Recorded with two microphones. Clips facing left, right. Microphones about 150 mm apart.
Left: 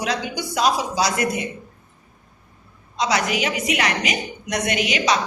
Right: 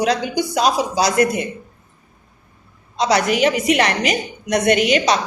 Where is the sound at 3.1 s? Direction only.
45° right (ahead or behind).